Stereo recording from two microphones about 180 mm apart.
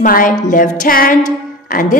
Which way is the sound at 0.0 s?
50° left (ahead or behind).